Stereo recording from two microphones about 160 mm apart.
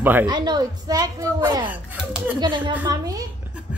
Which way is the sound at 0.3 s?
25° right (ahead or behind).